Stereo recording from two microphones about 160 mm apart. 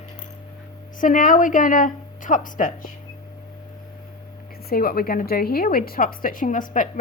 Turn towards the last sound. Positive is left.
turn(degrees=55)  # may be behind; listen again after turning